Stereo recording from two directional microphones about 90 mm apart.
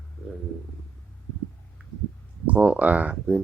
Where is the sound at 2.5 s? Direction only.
15° right (ahead or behind).